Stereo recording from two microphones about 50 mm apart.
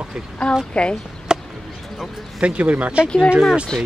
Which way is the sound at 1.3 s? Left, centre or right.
Centre.